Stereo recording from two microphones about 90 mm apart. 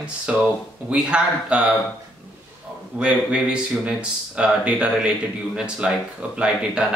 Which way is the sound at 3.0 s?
10° right (ahead or behind).